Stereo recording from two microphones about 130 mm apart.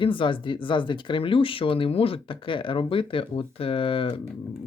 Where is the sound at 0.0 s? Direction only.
40° left (ahead or behind).